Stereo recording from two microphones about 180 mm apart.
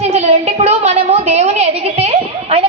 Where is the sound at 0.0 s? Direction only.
35° right (ahead or behind).